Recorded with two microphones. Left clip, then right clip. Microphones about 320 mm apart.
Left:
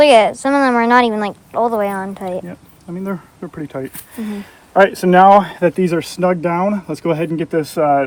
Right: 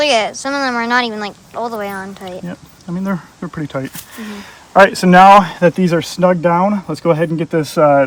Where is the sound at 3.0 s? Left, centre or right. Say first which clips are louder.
Right 2 dB; right.